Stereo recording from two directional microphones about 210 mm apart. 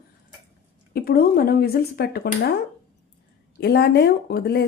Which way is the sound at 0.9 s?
45° left (ahead or behind).